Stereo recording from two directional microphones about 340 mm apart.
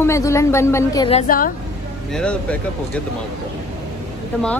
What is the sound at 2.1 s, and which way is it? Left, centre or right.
Speech, centre.